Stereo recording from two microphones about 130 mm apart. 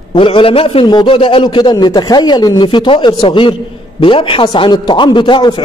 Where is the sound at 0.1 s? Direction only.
40° left (ahead or behind).